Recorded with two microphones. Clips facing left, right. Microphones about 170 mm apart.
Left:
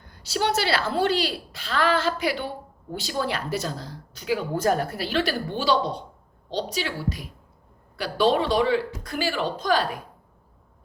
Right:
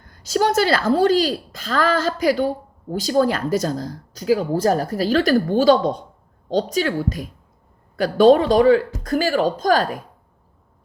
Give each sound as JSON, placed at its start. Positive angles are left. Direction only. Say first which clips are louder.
{"t": 0.0, "sound": "a woman's voice", "louder": "right 6 dB", "side_deg": -45}